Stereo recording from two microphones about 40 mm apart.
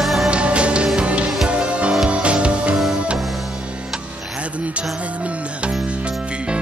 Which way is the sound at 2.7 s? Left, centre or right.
Centre.